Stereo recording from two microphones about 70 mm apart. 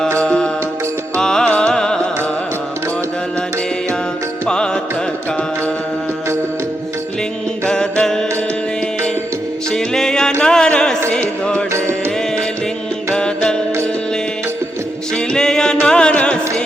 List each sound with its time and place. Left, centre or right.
0.2 s music: centre
4.4 s music: centre
7.7 s music: centre
9.6 s music: centre
11.7 s music: right
13.1 s music: centre
15.1 s music: centre